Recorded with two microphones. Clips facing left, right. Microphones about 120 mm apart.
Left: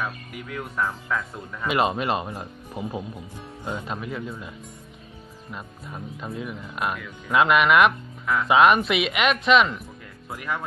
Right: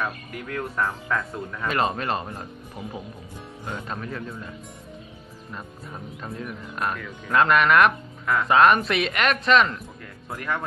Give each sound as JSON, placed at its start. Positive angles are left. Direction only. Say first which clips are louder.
{"t": 0.0, "sound": "speech", "louder": "right 2 dB", "side_deg": 5}
{"t": 1.7, "sound": "speech", "louder": "left 2 dB", "side_deg": 15}
{"t": 6.2, "sound": "speech", "louder": "left 1 dB", "side_deg": 5}